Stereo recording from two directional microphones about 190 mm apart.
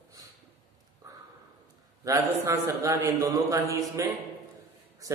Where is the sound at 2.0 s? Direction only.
15° right (ahead or behind).